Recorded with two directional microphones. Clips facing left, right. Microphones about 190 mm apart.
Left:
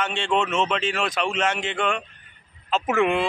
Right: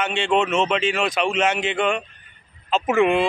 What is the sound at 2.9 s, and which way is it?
Speech, 10° right (ahead or behind).